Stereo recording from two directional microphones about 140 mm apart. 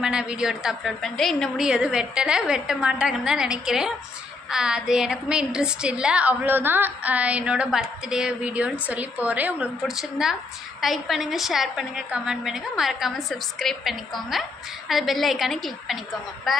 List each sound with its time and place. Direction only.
0.0 s a woman's voice: 5° right (ahead or behind)